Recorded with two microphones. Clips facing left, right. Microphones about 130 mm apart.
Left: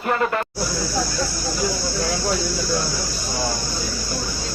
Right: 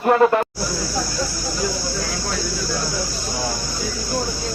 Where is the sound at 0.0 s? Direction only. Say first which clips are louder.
Right 7 dB; 30° right (ahead or behind).